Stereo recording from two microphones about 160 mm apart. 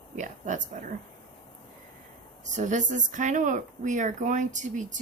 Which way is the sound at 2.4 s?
50° right (ahead or behind).